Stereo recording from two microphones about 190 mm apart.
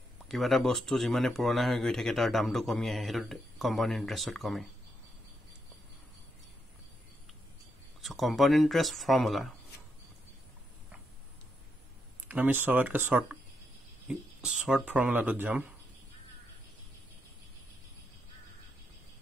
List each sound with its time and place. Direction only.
0.3 s speech: centre (ahead or behind)
8.0 s speech: centre (ahead or behind)
12.3 s speech: 10° right (ahead or behind)